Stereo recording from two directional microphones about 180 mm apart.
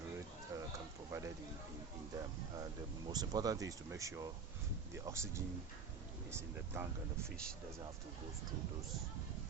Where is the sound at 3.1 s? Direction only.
20° right (ahead or behind).